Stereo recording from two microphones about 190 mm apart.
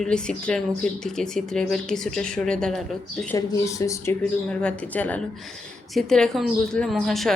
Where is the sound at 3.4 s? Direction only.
15° left (ahead or behind).